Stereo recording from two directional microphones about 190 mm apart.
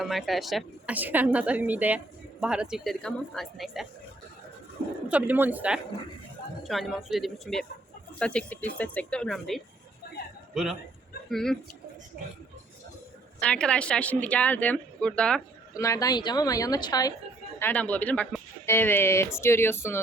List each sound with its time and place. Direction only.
0.0 s a woman's voice: centre (ahead or behind)
5.0 s a woman's voice: 10° right (ahead or behind)
13.4 s a woman's voice: 5° left (ahead or behind)
15.7 s a woman's voice: 15° left (ahead or behind)
17.6 s a woman's voice: 10° left (ahead or behind)